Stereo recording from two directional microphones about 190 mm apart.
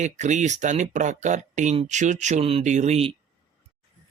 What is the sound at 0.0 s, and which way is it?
Speech, 40° right (ahead or behind).